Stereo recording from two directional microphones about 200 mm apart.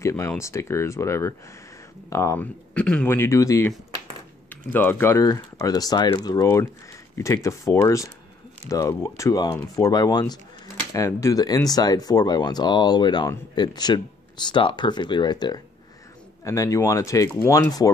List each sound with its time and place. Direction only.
0.0 s speech: 15° left (ahead or behind)